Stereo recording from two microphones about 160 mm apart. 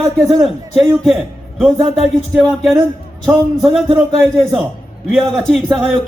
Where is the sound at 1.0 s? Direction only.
Centre (ahead or behind).